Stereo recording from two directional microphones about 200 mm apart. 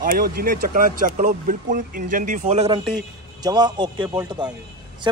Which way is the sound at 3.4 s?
20° right (ahead or behind).